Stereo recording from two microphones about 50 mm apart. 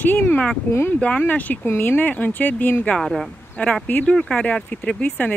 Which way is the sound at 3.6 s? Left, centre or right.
Left.